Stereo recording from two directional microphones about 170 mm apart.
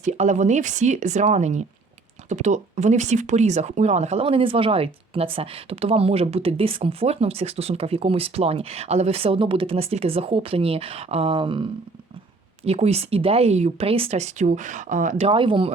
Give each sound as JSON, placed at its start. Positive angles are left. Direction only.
{"t": 0.0, "sound": "speech", "side_deg": -45}
{"t": 15.3, "sound": "speech", "side_deg": -30}